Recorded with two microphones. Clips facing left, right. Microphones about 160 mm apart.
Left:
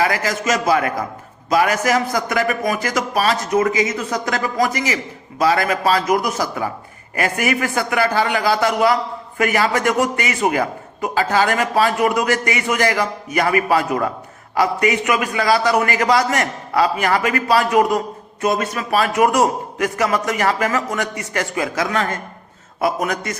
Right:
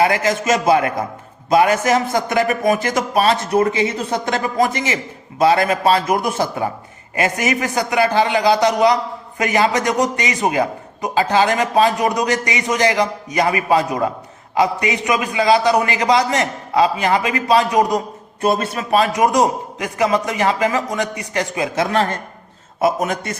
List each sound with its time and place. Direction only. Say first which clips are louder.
0.0 s a man's voice: right 3 dB; 25° right (ahead or behind)
18.4 s a man's voice: right 1 dB; 30° right (ahead or behind)
23.0 s a man's voice: even; 25° right (ahead or behind)